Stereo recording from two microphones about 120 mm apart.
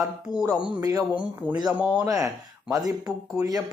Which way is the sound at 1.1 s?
10° right (ahead or behind).